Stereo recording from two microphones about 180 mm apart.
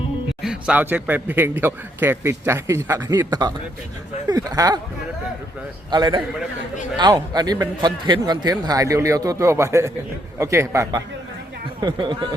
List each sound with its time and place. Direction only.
0.4 s a man's voice: 5° right (ahead or behind)
5.9 s a man's voice: 25° right (ahead or behind)